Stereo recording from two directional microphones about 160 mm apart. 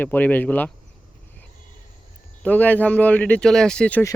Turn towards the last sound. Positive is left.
turn(degrees=5)  # may be behind; listen again after turning